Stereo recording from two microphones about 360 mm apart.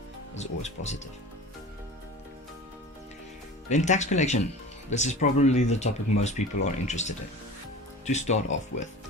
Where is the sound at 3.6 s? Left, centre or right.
Centre.